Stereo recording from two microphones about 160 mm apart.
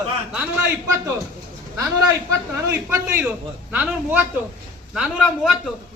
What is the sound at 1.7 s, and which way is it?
A man's voice, 20° right (ahead or behind).